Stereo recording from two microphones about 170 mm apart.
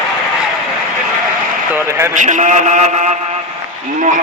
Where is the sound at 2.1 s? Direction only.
45° right (ahead or behind).